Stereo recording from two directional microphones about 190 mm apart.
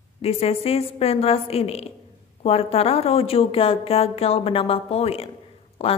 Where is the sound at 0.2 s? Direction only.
30° left (ahead or behind).